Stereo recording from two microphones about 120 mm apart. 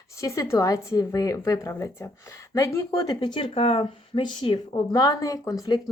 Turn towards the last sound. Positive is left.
turn(degrees=30)  # may be behind; listen again after turning